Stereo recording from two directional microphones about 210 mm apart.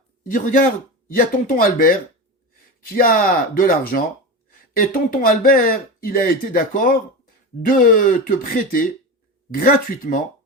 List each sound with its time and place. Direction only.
0.3 s speech: 40° left (ahead or behind)